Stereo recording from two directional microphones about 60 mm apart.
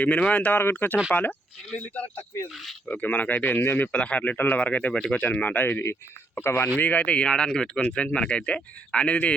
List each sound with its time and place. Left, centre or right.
0.0 s speech: left
0.6 s speech: left
3.9 s speech: left
4.9 s speech: centre
5.2 s speech: left
6.7 s speech: left